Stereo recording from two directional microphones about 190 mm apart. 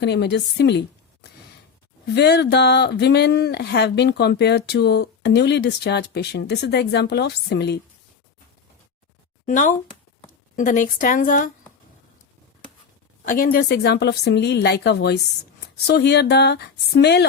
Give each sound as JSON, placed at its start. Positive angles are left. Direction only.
{"t": 0.0, "sound": "a woman's voice", "side_deg": 65}
{"t": 9.5, "sound": "a woman's voice", "side_deg": 40}
{"t": 13.2, "sound": "speech", "side_deg": 50}